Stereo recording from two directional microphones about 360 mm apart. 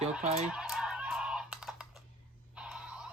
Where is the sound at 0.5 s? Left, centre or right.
Centre.